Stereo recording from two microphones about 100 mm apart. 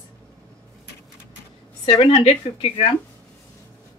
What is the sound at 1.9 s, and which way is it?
A woman's voice, 65° left (ahead or behind).